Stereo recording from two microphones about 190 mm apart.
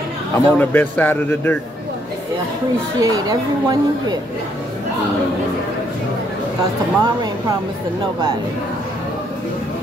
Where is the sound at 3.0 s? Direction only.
20° right (ahead or behind).